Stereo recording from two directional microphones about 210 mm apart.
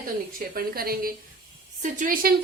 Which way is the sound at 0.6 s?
45° right (ahead or behind).